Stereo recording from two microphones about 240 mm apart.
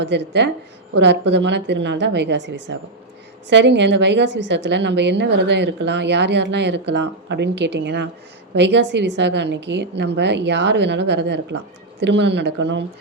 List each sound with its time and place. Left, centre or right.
0.0 s a woman's voice: right